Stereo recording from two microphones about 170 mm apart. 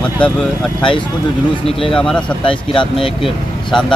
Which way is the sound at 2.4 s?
30° left (ahead or behind).